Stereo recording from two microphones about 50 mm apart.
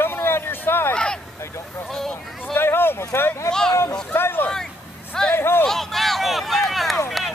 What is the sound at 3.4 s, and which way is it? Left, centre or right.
Speech, centre.